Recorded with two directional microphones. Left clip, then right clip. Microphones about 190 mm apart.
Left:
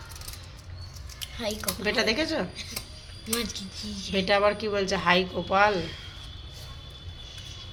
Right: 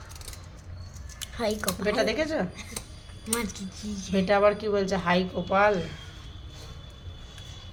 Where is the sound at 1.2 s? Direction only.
35° right (ahead or behind).